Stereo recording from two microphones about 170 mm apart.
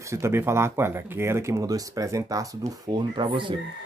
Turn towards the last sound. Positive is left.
turn(degrees=-30)  # may be behind; listen again after turning